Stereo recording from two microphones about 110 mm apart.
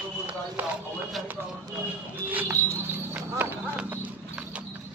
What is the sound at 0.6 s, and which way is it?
Speech, 15° right (ahead or behind).